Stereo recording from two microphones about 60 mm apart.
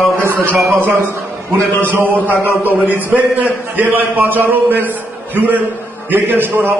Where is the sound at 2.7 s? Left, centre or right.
Right.